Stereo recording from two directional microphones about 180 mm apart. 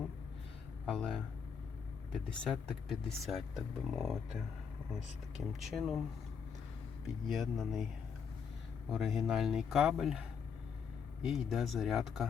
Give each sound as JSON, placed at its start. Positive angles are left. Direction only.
{"t": 0.9, "sound": "speech", "side_deg": 0}
{"t": 5.5, "sound": "speech", "side_deg": 0}
{"t": 7.3, "sound": "speech", "side_deg": 0}
{"t": 8.9, "sound": "speech", "side_deg": 0}